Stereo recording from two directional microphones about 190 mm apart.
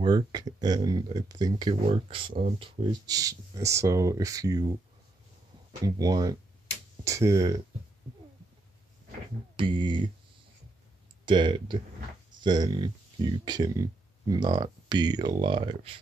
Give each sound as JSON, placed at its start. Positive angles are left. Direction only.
{"t": 0.0, "sound": "speech", "side_deg": -20}
{"t": 5.9, "sound": "speech", "side_deg": -20}
{"t": 9.6, "sound": "speech", "side_deg": -25}
{"t": 11.2, "sound": "speech", "side_deg": -25}